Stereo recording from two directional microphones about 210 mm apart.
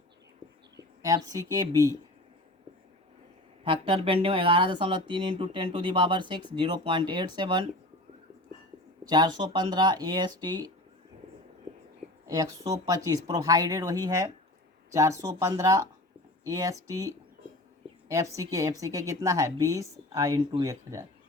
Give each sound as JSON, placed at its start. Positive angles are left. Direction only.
{"t": 0.8, "sound": "a woman's voice", "side_deg": -15}
{"t": 3.6, "sound": "speech", "side_deg": -25}
{"t": 9.0, "sound": "speech", "side_deg": -20}
{"t": 12.3, "sound": "a woman's voice", "side_deg": -15}